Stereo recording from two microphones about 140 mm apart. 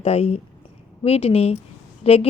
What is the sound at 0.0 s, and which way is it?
Speech, 45° left (ahead or behind).